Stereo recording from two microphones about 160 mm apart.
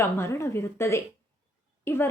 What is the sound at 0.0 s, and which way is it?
A woman's voice, 15° left (ahead or behind).